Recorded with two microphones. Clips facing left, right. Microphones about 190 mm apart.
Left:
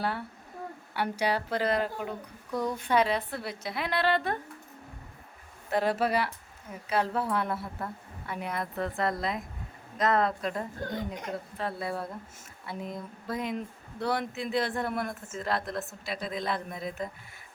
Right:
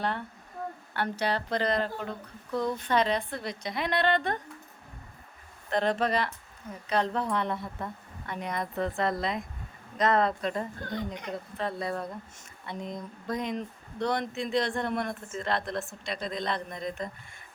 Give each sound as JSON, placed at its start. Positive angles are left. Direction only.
{"t": 0.0, "sound": "speech", "side_deg": 5}
{"t": 5.7, "sound": "speech", "side_deg": 5}